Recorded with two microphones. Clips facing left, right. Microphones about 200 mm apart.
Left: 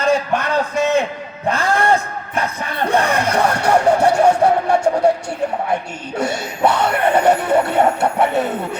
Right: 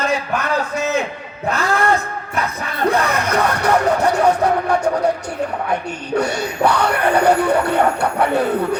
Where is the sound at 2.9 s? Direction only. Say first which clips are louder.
Even; 30° left (ahead or behind).